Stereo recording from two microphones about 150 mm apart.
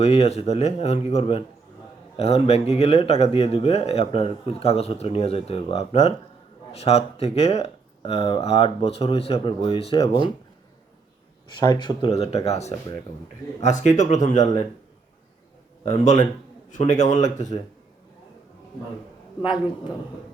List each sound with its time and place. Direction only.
0.0 s speech: 45° left (ahead or behind)
11.4 s speech: 25° left (ahead or behind)
12.1 s speech: 45° left (ahead or behind)
15.8 s speech: 50° left (ahead or behind)